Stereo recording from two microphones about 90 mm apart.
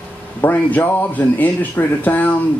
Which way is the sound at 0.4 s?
20° left (ahead or behind).